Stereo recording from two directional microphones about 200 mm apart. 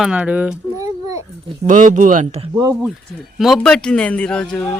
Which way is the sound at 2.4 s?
20° right (ahead or behind).